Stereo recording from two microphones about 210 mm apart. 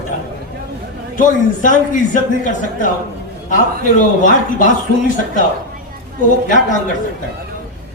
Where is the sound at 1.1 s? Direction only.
40° left (ahead or behind).